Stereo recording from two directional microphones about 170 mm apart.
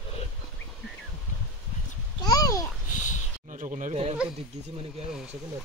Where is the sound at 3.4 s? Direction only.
45° right (ahead or behind).